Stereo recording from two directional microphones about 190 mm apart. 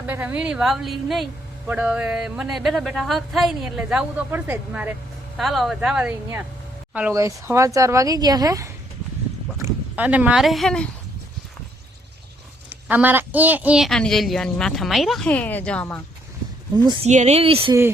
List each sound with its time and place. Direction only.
0.1 s a woman's voice: 5° right (ahead or behind)
12.9 s a woman's voice: 10° right (ahead or behind); by 16.0 s 5° left (ahead or behind)
16.7 s speech: 25° right (ahead or behind)
17.1 s speech: 35° right (ahead or behind)